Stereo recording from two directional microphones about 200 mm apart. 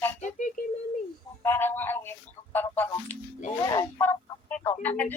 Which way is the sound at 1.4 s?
10° left (ahead or behind).